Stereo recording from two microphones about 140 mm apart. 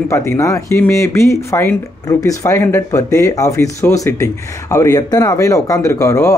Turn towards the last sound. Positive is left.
turn(degrees=20)  # may be behind; listen again after turning